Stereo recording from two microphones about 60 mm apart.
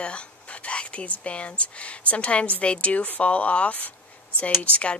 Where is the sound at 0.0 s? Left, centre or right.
Centre.